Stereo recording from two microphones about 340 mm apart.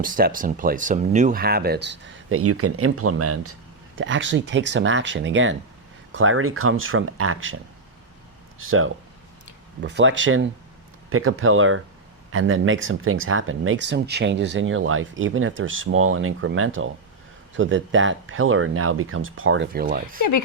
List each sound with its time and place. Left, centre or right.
0.0 s speech: right
8.5 s speech: right